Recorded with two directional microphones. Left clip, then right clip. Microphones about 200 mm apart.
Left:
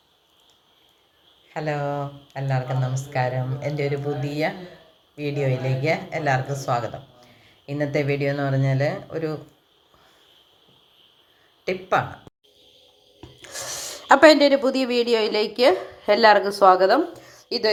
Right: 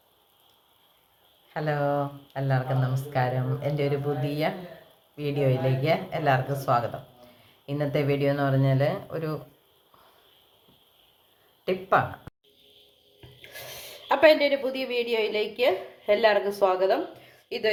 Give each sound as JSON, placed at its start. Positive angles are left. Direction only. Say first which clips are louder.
{"t": 1.5, "sound": "speech", "louder": "even", "side_deg": -5}
{"t": 11.6, "sound": "speech", "louder": "left 1 dB", "side_deg": 0}
{"t": 13.4, "sound": "speech", "louder": "left 8 dB", "side_deg": 25}